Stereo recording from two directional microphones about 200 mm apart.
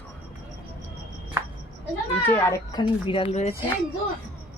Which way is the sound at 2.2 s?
15° left (ahead or behind).